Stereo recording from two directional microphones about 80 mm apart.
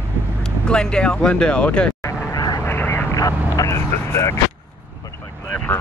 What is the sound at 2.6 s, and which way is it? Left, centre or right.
Vehicle, left.